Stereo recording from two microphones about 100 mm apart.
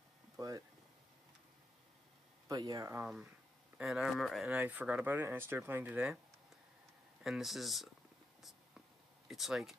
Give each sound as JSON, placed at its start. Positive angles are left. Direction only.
{"t": 0.4, "sound": "speech", "side_deg": -35}
{"t": 2.4, "sound": "speech", "side_deg": -40}
{"t": 3.7, "sound": "speech", "side_deg": -5}
{"t": 4.6, "sound": "speech", "side_deg": -15}
{"t": 7.2, "sound": "speech", "side_deg": 0}
{"t": 8.4, "sound": "whispering", "side_deg": 0}
{"t": 9.3, "sound": "speech", "side_deg": 0}